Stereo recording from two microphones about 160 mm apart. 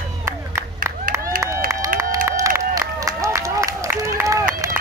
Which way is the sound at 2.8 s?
20° right (ahead or behind).